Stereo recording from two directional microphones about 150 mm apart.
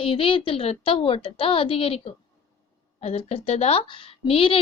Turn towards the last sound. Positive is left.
turn(degrees=35)  # may be behind; listen again after turning